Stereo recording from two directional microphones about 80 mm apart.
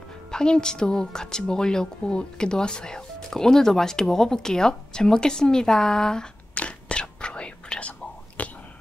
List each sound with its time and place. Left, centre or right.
0.3 s speech: centre
8.4 s whispering: centre